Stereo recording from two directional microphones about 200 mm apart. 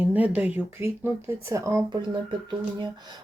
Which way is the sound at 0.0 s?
10° right (ahead or behind).